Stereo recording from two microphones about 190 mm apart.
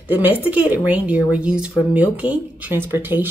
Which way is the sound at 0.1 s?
10° right (ahead or behind).